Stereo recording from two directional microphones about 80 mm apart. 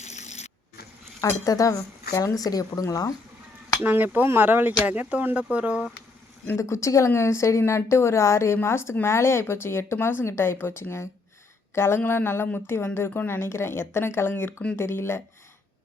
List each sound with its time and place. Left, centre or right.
1.5 s speech: left
3.8 s speech: right
6.4 s a woman's voice: left